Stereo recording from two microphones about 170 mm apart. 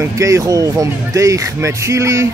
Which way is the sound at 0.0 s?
20° right (ahead or behind).